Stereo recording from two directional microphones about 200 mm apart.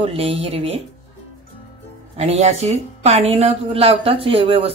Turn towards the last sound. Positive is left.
turn(degrees=-30)  # may be behind; listen again after turning